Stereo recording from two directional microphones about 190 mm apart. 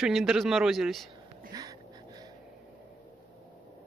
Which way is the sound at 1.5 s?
20° right (ahead or behind).